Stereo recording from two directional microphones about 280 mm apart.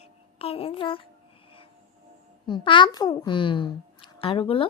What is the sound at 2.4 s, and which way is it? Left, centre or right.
A child's voice, centre.